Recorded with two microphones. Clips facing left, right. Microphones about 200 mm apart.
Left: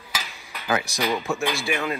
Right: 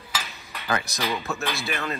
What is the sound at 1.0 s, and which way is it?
Speech, 15° left (ahead or behind).